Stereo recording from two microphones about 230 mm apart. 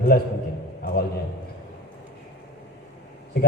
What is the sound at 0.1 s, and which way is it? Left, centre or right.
Speech, left.